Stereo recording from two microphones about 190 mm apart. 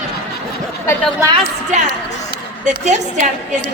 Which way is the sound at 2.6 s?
40° right (ahead or behind).